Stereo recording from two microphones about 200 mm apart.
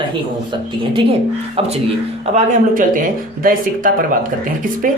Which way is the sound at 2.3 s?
40° right (ahead or behind).